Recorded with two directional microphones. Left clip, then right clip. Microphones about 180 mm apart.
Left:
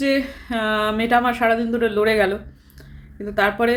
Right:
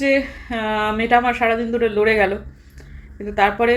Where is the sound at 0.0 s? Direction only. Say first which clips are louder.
Right 3 dB; 25° left (ahead or behind).